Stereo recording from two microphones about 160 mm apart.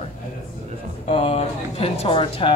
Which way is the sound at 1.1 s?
35° left (ahead or behind).